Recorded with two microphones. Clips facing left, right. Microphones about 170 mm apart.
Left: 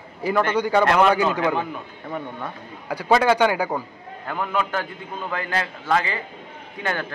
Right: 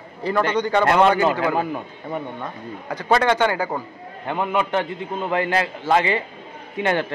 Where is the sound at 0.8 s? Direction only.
25° right (ahead or behind).